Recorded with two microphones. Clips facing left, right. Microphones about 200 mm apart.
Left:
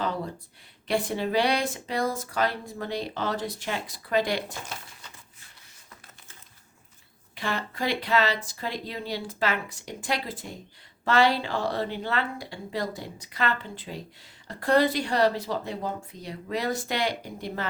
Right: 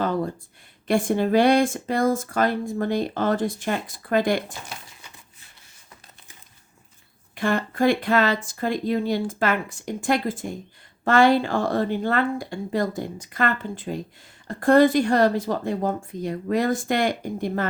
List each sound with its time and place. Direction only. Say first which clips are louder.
0.9 s speech: right 6 dB; 50° right (ahead or behind)
7.3 s speech: right 8 dB; 50° right (ahead or behind)